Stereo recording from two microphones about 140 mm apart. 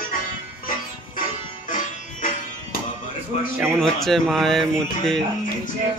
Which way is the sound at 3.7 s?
5° left (ahead or behind).